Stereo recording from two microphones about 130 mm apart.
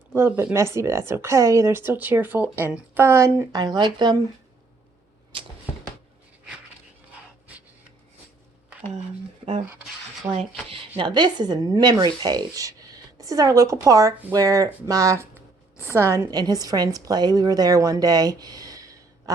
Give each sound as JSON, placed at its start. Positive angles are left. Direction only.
{"t": 0.1, "sound": "speech", "side_deg": -20}
{"t": 10.3, "sound": "a woman's voice", "side_deg": -45}